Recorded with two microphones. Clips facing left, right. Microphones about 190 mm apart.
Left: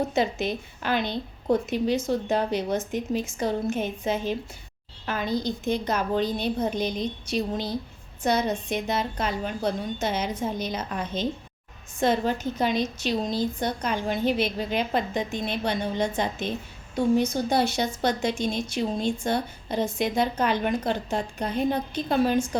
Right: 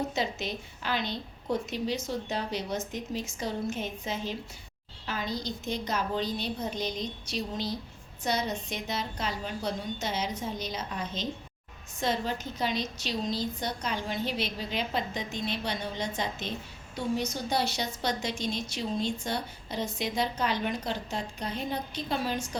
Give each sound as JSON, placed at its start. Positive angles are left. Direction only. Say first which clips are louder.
{"t": 0.1, "sound": "a woman's voice", "louder": "left 7 dB", "side_deg": 55}